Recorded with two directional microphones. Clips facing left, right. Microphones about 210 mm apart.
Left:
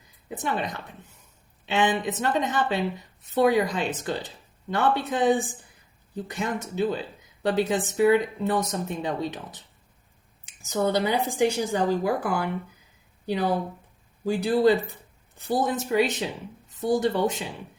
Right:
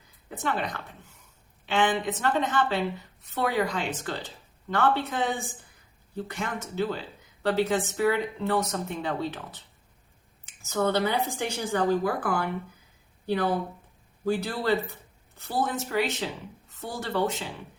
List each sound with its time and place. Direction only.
0.3 s speech: 20° left (ahead or behind)
10.4 s speech: 15° left (ahead or behind)